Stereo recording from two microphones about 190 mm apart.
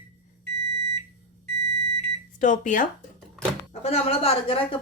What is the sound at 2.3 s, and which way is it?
Speech, 45° left (ahead or behind).